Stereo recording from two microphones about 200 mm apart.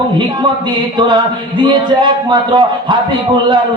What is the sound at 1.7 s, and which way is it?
A man's voice, 25° right (ahead or behind).